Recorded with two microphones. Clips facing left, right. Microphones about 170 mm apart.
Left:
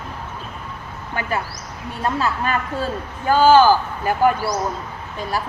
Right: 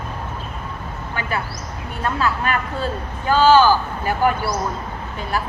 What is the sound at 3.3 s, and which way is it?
Speech, 50° left (ahead or behind).